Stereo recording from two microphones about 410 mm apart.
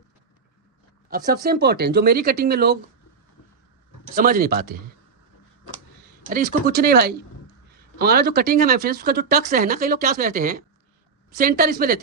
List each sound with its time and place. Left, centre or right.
1.1 s speech: right
4.1 s speech: right
6.2 s speech: centre